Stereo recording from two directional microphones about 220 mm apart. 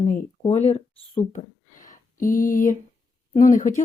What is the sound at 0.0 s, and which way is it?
Speech, 35° left (ahead or behind).